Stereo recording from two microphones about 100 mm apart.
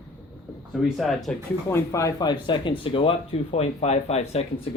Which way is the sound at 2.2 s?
50° left (ahead or behind).